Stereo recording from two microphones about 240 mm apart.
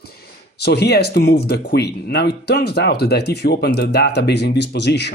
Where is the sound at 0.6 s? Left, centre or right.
Left.